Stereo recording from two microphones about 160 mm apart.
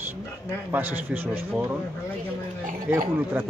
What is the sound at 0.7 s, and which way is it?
Speech, 10° right (ahead or behind).